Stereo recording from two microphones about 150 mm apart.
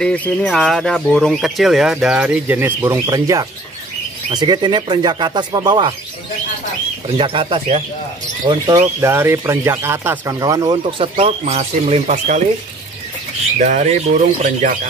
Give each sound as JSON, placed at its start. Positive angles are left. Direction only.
{"t": 0.0, "sound": "speech", "side_deg": 10}
{"t": 7.2, "sound": "speech", "side_deg": -35}
{"t": 8.5, "sound": "speech", "side_deg": -25}
{"t": 13.6, "sound": "speech", "side_deg": -55}